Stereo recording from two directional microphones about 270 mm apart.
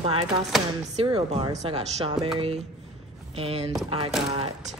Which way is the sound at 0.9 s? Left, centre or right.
Centre.